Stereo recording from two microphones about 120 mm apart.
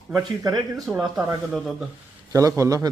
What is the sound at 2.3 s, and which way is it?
Speech, 25° right (ahead or behind).